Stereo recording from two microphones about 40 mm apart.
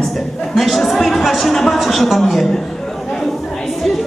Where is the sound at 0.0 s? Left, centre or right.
Centre.